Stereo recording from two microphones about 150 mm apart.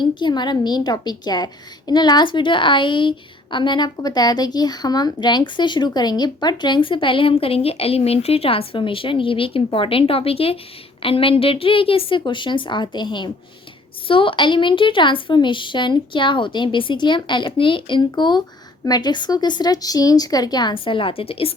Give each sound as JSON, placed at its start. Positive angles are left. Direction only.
{"t": 0.0, "sound": "a woman's voice", "side_deg": 30}